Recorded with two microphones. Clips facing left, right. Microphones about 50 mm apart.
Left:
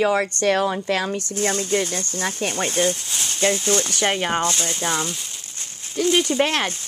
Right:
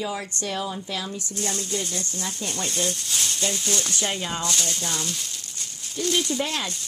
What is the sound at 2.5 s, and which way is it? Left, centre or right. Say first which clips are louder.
Speech: left 6 dB; left.